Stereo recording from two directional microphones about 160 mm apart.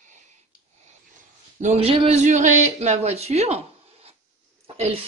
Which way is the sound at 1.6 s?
40° right (ahead or behind).